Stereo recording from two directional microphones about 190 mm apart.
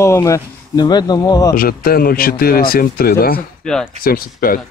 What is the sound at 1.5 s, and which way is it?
Speech, 50° left (ahead or behind).